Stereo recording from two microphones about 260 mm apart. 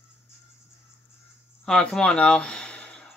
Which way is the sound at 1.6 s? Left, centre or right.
Centre.